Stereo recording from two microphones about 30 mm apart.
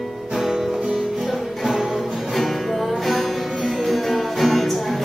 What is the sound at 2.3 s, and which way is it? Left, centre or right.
Music, centre.